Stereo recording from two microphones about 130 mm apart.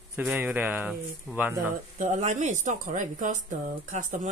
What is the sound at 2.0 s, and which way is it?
A woman's voice, 70° right (ahead or behind).